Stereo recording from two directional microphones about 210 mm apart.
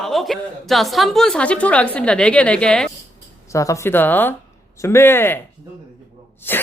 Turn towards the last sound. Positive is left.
turn(degrees=10)  # may be behind; listen again after turning